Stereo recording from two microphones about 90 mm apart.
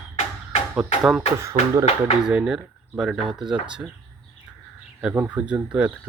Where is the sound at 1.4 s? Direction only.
35° right (ahead or behind).